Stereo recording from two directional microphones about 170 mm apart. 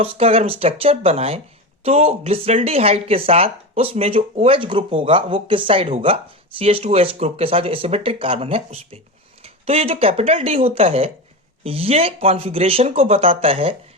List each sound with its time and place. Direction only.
0.0 s speech: 35° right (ahead or behind)